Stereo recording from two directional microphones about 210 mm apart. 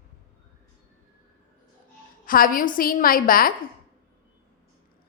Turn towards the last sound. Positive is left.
turn(degrees=45)  # may be behind; listen again after turning